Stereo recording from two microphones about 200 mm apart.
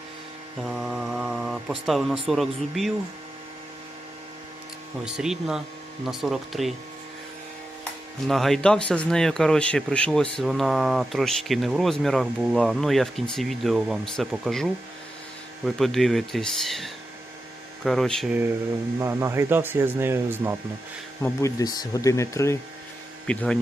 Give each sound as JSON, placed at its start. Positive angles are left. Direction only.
{"t": 0.7, "sound": "speech", "side_deg": -5}
{"t": 5.0, "sound": "speech", "side_deg": 0}
{"t": 8.3, "sound": "speech", "side_deg": 0}
{"t": 18.9, "sound": "speech", "side_deg": -15}
{"t": 21.2, "sound": "speech", "side_deg": 15}